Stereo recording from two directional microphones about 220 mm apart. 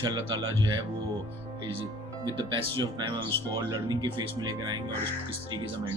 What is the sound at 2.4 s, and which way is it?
Speech, 20° right (ahead or behind).